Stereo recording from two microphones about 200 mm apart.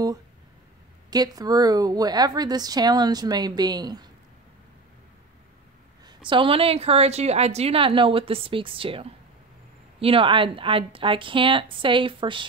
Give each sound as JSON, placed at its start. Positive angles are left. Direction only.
{"t": 1.1, "sound": "a woman's voice", "side_deg": -20}
{"t": 6.0, "sound": "a woman's voice", "side_deg": -25}